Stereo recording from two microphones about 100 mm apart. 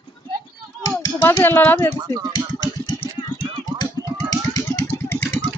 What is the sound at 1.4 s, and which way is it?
Speech, 20° left (ahead or behind).